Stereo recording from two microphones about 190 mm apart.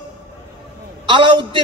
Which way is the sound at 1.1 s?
25° right (ahead or behind).